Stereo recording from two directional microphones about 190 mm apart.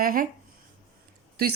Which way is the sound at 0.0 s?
45° right (ahead or behind).